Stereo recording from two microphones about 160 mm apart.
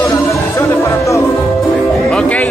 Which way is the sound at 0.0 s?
15° left (ahead or behind).